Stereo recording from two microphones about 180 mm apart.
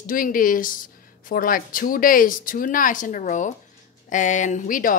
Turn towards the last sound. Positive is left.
turn(degrees=50)  # may be behind; listen again after turning